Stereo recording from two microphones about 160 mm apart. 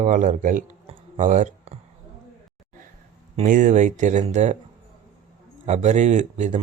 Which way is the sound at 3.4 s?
55° right (ahead or behind).